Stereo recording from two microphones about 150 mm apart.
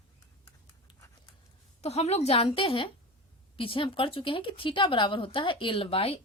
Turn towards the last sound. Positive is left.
turn(degrees=40)  # may be behind; listen again after turning